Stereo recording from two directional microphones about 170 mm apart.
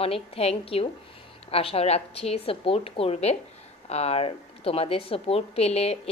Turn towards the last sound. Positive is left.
turn(degrees=35)  # may be behind; listen again after turning